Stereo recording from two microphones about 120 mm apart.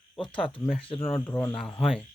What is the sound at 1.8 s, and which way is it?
Speech, 5° left (ahead or behind).